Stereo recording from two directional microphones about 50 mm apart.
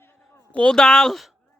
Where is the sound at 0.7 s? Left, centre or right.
Centre.